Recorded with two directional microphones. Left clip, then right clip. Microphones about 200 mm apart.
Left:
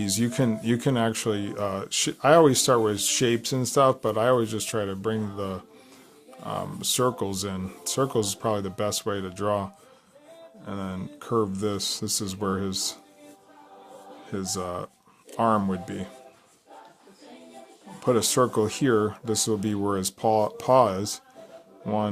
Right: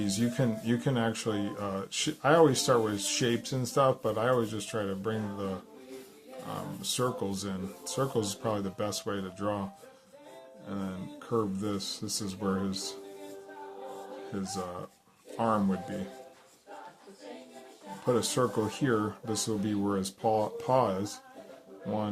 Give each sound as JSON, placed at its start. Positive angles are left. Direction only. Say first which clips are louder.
{"t": 0.0, "sound": "speech", "louder": "left 5 dB", "side_deg": 55}
{"t": 6.5, "sound": "speech", "louder": "left 7 dB", "side_deg": 50}
{"t": 10.7, "sound": "speech", "louder": "left 5 dB", "side_deg": 55}
{"t": 14.3, "sound": "speech", "louder": "left 7 dB", "side_deg": 55}
{"t": 18.0, "sound": "speech", "louder": "left 6 dB", "side_deg": 55}